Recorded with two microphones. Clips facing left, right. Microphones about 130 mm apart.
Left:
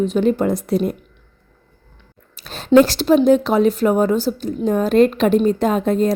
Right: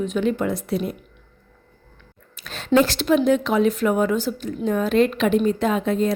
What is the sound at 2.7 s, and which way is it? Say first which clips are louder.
A woman's voice: left 5 dB; 35° left (ahead or behind).